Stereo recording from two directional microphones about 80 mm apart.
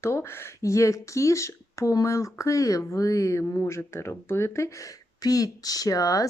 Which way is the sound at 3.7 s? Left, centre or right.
Left.